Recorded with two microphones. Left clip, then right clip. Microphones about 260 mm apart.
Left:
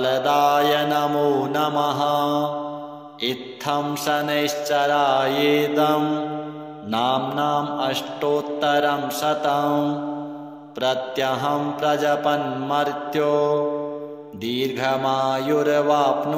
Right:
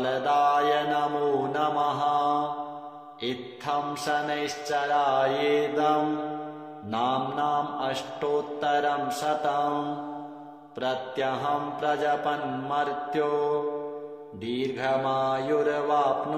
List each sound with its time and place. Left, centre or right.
0.0 s mantra: left
10.8 s mantra: left